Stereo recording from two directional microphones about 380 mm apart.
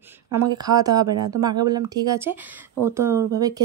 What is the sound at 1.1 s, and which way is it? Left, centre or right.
Speech, right.